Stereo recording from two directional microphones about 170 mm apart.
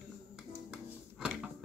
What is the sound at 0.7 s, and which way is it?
Music, 5° right (ahead or behind).